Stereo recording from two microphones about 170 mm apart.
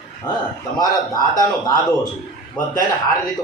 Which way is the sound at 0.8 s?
25° left (ahead or behind).